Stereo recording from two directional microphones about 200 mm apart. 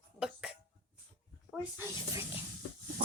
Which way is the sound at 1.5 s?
10° right (ahead or behind).